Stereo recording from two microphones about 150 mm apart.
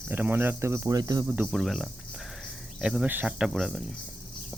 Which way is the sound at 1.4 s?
Centre (ahead or behind).